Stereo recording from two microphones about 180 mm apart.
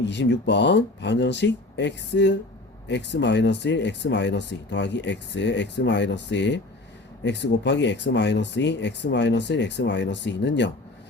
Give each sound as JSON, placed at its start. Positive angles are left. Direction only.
{"t": 0.0, "sound": "speech", "side_deg": 75}